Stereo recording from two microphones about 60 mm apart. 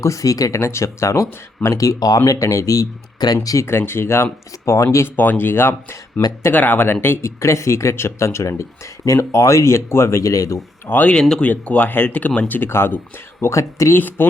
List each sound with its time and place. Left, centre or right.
0.0 s speech: left
0.6 s speech: left
3.4 s speech: left
3.7 s speech: left
5.0 s speech: left
10.8 s speech: left
11.1 s speech: centre
11.4 s speech: left
13.4 s speech: left
13.9 s speech: left